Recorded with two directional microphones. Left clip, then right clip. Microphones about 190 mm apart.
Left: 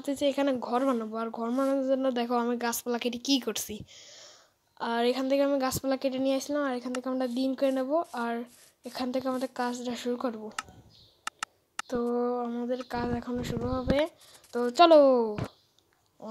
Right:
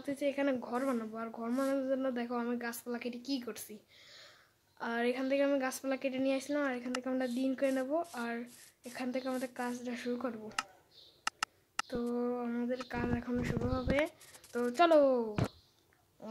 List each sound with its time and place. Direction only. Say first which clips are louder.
0.0 s speech: left 6 dB; 30° left (ahead or behind)
11.2 s a sound: even; 10° left (ahead or behind)
11.9 s speech: left 9 dB; 20° left (ahead or behind)